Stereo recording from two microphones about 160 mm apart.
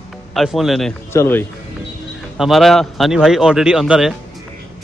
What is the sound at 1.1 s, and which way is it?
Speech, 15° left (ahead or behind).